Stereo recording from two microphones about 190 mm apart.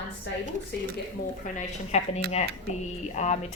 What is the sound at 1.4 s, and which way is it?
Speech, 40° left (ahead or behind).